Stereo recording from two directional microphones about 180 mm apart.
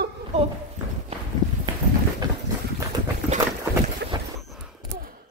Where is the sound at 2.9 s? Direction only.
20° right (ahead or behind).